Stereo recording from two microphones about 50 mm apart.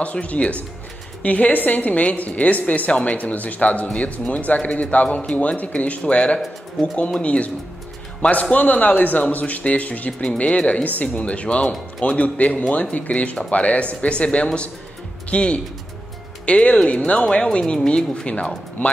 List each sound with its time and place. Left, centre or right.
0.0 s a woman's voice: left
6.8 s speech: centre
7.2 s a woman's voice: left